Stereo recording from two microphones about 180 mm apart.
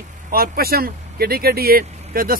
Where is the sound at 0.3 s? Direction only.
55° right (ahead or behind).